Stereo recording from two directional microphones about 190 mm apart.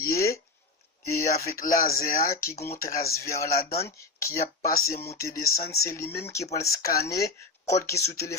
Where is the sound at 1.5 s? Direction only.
45° left (ahead or behind).